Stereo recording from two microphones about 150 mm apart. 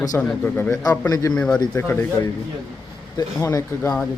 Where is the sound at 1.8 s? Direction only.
20° left (ahead or behind).